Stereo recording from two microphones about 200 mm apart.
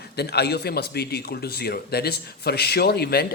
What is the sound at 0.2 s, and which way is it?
Speech, 55° left (ahead or behind).